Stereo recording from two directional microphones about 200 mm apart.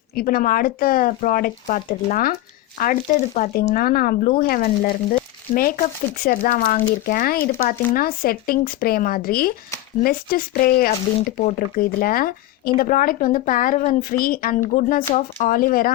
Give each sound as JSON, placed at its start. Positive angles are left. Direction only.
{"t": 0.2, "sound": "speech", "side_deg": 45}
{"t": 6.2, "sound": "speech", "side_deg": 45}